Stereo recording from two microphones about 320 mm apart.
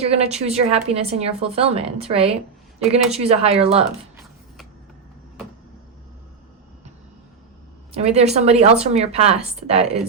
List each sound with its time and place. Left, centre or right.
0.0 s a woman's voice: centre
7.9 s a woman's voice: centre